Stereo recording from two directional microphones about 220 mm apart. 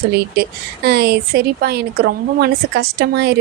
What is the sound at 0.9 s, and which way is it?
Speech, 45° right (ahead or behind).